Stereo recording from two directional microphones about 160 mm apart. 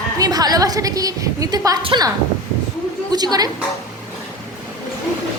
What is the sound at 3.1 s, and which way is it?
Speech, 25° right (ahead or behind).